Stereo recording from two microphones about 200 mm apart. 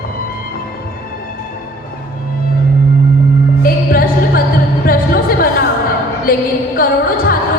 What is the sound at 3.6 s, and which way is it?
Music, 45° left (ahead or behind).